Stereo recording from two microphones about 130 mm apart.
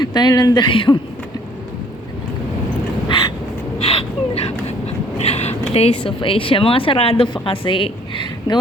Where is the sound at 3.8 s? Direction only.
50° left (ahead or behind).